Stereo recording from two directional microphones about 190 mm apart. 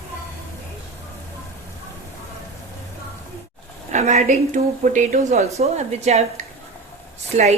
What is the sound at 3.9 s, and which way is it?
Speech, 35° right (ahead or behind).